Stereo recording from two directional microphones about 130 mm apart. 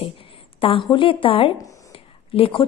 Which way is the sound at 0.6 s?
40° left (ahead or behind).